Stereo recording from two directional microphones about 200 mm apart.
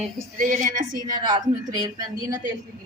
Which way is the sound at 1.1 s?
20° right (ahead or behind).